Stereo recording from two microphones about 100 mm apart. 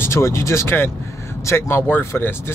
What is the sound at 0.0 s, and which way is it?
Speech, 25° left (ahead or behind).